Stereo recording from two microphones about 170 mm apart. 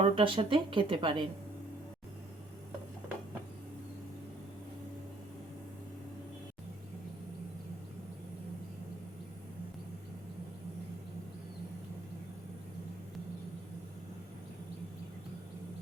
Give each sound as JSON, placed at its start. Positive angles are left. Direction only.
{"t": 0.0, "sound": "a woman's voice", "side_deg": -30}